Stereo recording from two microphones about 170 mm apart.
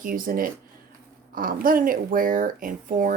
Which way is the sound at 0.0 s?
55° right (ahead or behind).